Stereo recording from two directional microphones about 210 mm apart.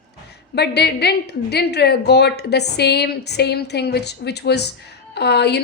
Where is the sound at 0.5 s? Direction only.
50° left (ahead or behind).